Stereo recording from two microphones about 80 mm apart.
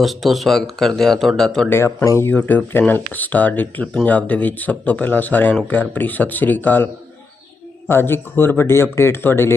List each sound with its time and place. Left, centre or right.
0.0 s speech: centre
1.7 s speech: left
2.3 s speech: left